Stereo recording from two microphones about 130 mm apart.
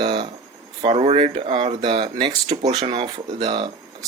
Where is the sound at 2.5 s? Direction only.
55° right (ahead or behind).